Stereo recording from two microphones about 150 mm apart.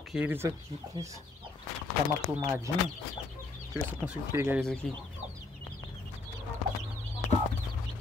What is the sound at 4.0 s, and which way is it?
Speech, 15° right (ahead or behind).